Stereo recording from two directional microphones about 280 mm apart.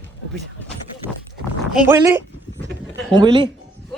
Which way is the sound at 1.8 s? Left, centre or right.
Centre.